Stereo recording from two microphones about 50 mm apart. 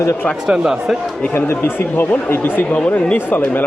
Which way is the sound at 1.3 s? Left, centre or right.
Left.